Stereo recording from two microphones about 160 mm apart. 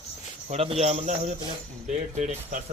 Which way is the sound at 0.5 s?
40° right (ahead or behind).